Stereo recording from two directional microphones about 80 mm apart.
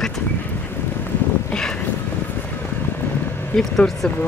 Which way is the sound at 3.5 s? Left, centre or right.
Centre.